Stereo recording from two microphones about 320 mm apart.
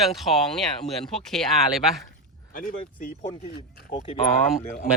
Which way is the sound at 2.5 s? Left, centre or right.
Left.